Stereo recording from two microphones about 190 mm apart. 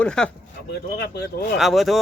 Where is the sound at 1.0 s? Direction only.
60° left (ahead or behind).